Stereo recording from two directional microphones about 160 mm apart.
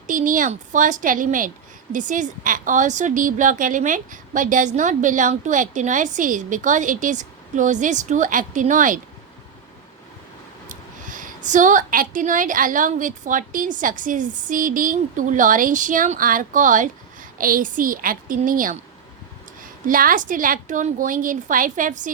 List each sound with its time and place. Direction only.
0.1 s a woman's voice: 55° right (ahead or behind)
10.7 s a woman's voice: 55° right (ahead or behind)
19.9 s a woman's voice: 60° right (ahead or behind)